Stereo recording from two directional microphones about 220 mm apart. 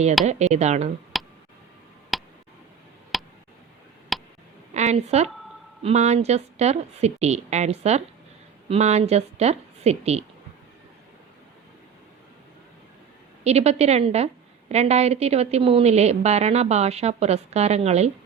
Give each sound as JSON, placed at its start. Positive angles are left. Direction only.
{"t": 0.3, "sound": "speech", "side_deg": -30}
{"t": 1.1, "sound": "tick", "side_deg": 0}
{"t": 4.1, "sound": "a sound", "side_deg": 0}
{"t": 4.7, "sound": "a woman's voice", "side_deg": -30}
{"t": 13.4, "sound": "a woman's voice", "side_deg": -30}